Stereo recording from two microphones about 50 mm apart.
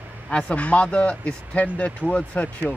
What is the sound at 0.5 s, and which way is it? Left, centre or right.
Speech, left.